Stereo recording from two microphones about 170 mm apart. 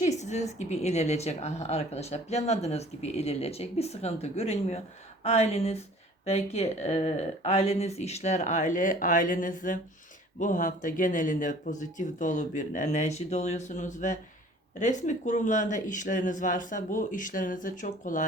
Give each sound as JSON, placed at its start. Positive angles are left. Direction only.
{"t": 0.0, "sound": "a woman's voice", "side_deg": 40}